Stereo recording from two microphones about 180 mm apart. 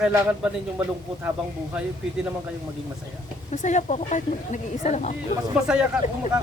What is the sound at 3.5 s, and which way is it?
Speech, 40° left (ahead or behind).